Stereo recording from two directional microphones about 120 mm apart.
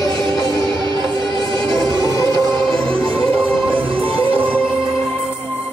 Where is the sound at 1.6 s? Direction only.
30° left (ahead or behind).